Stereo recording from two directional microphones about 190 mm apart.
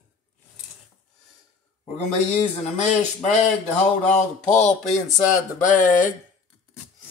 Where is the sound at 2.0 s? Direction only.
35° left (ahead or behind).